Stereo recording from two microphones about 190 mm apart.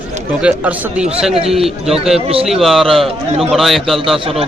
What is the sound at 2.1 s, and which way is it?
Speech, 30° right (ahead or behind).